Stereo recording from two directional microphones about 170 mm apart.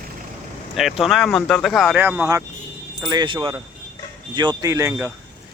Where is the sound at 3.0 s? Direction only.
25° right (ahead or behind).